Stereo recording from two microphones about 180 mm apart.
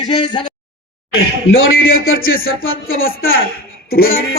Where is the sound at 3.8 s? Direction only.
55° left (ahead or behind).